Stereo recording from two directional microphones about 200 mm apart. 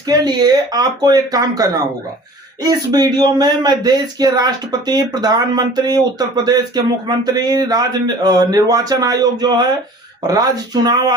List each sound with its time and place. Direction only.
0.1 s speech: 20° right (ahead or behind)
10.8 s speech: 20° right (ahead or behind)